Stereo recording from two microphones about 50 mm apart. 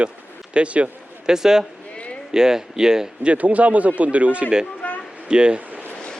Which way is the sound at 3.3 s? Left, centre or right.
Right.